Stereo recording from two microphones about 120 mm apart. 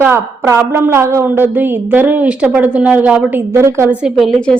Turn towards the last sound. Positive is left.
turn(degrees=5)  # may be behind; listen again after turning